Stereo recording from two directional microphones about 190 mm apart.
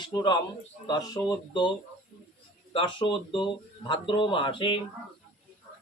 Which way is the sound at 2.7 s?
25° left (ahead or behind).